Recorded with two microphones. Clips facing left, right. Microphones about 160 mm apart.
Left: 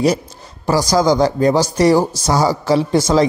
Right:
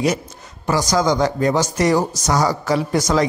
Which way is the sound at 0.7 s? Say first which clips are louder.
Left 4 dB; 35° left (ahead or behind).